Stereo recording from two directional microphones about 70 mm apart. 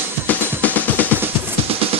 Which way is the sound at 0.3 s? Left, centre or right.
Left.